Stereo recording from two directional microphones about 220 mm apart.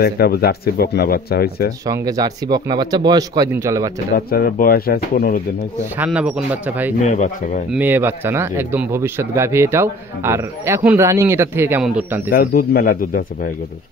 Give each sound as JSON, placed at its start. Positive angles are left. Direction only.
{"t": 0.0, "sound": "speech", "side_deg": 45}
{"t": 1.9, "sound": "a man's voice", "side_deg": -15}
{"t": 4.1, "sound": "speech", "side_deg": 40}
{"t": 5.9, "sound": "speech", "side_deg": -5}
{"t": 7.0, "sound": "a man's voice", "side_deg": 35}
{"t": 7.7, "sound": "a man's voice", "side_deg": -10}
{"t": 12.3, "sound": "a man's voice", "side_deg": 40}